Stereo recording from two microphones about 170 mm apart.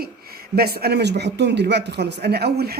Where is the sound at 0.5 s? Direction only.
65° right (ahead or behind).